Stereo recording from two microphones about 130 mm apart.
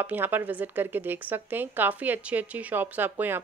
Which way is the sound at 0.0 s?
15° right (ahead or behind).